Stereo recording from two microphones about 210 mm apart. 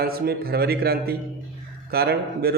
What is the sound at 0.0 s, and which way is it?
A man's voice, 45° right (ahead or behind).